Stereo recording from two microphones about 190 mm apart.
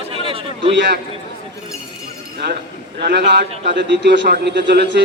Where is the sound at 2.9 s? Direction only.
60° right (ahead or behind).